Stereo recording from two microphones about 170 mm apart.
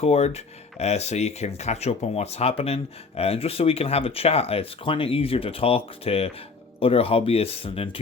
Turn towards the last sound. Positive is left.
turn(degrees=35)  # may be behind; listen again after turning